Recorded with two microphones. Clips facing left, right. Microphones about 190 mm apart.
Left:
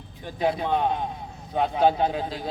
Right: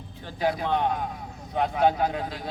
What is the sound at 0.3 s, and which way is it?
A man's voice, 25° left (ahead or behind).